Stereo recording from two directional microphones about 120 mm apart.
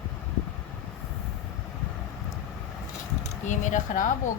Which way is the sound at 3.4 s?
90° left.